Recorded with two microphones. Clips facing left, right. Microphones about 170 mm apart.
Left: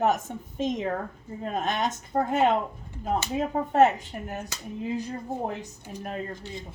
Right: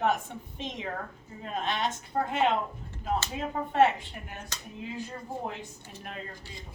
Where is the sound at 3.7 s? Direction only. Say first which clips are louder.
Left 3 dB; 45° left (ahead or behind).